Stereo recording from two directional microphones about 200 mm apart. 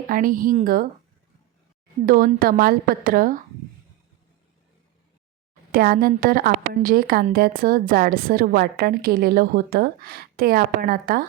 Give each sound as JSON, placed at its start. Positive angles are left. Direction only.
{"t": 0.1, "sound": "a woman's voice", "side_deg": -45}
{"t": 2.0, "sound": "a woman's voice", "side_deg": -45}
{"t": 5.7, "sound": "a woman's voice", "side_deg": -45}